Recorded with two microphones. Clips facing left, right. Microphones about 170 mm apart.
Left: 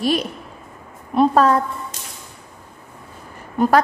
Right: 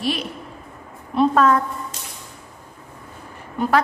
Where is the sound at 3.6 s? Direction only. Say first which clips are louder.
Left 5 dB; 45° left (ahead or behind).